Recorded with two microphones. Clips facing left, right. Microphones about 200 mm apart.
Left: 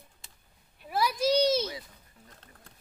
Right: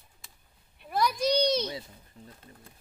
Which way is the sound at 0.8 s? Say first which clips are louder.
Even; 5° left (ahead or behind).